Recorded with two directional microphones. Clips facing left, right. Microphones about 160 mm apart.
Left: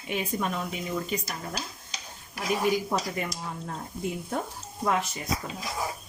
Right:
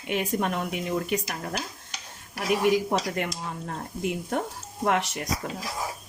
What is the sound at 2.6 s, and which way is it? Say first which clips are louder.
Speech: right 3 dB; 70° right (ahead or behind).